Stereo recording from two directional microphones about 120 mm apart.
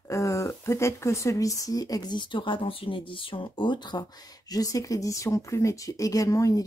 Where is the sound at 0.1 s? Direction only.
25° left (ahead or behind).